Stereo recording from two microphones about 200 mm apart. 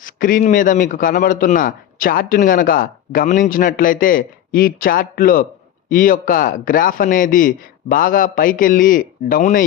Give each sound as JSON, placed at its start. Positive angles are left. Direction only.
{"t": 0.0, "sound": "a man's voice", "side_deg": 45}